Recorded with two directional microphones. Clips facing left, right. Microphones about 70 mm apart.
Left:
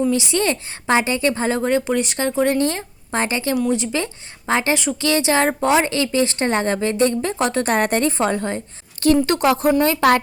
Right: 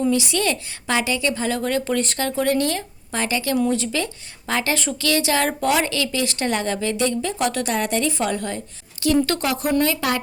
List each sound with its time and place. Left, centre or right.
0.1 s a woman's voice: left